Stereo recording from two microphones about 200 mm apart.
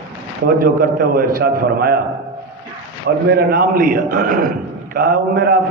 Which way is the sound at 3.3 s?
50° right (ahead or behind).